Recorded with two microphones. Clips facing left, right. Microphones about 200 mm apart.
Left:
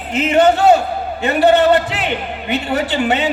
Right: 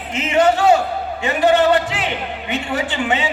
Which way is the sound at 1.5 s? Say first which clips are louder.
Left 2 dB; 60° left (ahead or behind).